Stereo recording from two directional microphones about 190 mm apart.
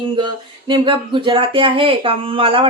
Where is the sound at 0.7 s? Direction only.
25° right (ahead or behind).